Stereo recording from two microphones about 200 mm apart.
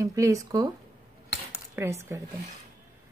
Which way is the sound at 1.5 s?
10° right (ahead or behind).